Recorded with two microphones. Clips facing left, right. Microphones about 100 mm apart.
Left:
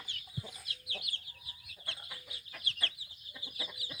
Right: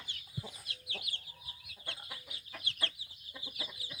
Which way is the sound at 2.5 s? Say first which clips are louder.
Right 1 dB; 20° right (ahead or behind).